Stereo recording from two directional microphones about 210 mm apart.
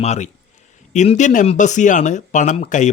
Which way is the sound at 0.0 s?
35° left (ahead or behind).